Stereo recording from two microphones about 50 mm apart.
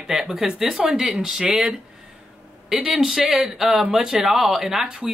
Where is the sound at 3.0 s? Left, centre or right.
Centre.